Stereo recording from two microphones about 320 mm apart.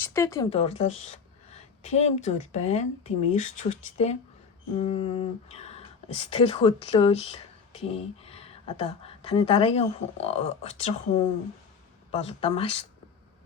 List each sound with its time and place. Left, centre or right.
0.0 s speech: centre